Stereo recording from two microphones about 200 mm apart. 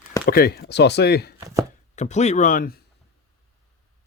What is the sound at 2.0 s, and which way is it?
Speech, 35° left (ahead or behind).